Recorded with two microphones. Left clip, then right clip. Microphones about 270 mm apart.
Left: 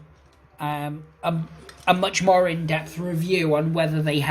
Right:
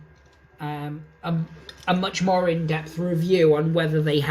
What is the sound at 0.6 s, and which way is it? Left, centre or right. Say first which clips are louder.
A man's voice: left 4 dB; centre.